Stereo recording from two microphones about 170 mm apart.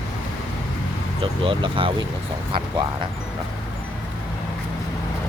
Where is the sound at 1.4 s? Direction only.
30° right (ahead or behind).